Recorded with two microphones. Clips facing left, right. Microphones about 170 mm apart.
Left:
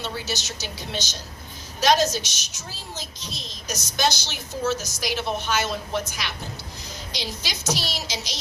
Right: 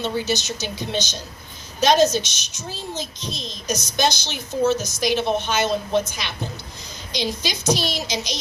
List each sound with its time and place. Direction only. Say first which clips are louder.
0.0 s a child's voice: right 7 dB; 20° right (ahead or behind)